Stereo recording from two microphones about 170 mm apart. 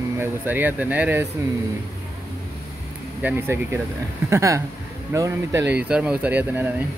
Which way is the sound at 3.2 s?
10° right (ahead or behind).